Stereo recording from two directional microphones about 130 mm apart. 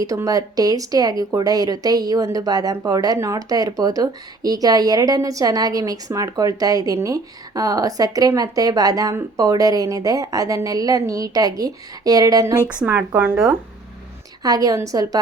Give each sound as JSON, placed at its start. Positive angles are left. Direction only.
{"t": 0.0, "sound": "speech", "side_deg": -25}
{"t": 12.6, "sound": "speech", "side_deg": -15}
{"t": 14.4, "sound": "speech", "side_deg": -30}